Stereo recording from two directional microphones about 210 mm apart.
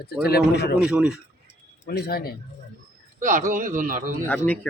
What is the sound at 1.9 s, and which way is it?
Speech, 50° left (ahead or behind).